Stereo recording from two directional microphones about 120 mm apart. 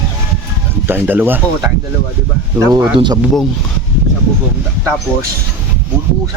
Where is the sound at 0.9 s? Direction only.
15° right (ahead or behind).